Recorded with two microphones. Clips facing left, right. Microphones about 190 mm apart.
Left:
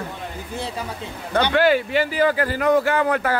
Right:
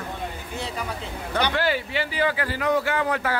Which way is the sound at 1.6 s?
50° left (ahead or behind).